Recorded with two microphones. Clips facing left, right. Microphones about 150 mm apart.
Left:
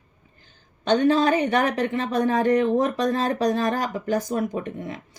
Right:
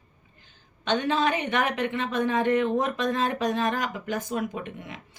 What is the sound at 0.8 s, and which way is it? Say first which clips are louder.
Speech: left 6 dB; 40° left (ahead or behind).